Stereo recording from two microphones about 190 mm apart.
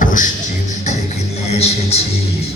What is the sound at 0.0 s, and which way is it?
Music, 45° left (ahead or behind).